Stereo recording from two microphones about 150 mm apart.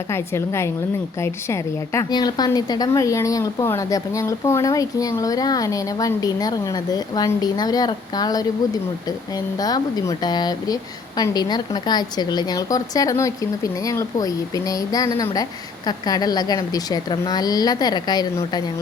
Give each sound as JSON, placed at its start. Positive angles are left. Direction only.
{"t": 0.1, "sound": "a woman's voice", "side_deg": 20}